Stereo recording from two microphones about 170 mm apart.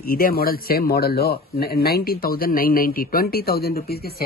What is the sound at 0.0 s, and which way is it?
Speech, 60° left (ahead or behind).